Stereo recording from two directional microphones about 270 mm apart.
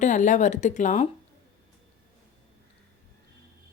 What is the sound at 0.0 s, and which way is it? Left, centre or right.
Speech, left.